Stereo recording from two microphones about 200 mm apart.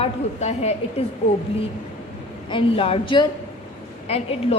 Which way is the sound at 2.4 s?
25° left (ahead or behind).